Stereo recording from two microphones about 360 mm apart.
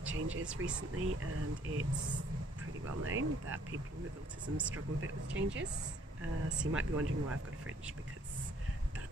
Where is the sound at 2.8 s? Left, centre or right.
Right.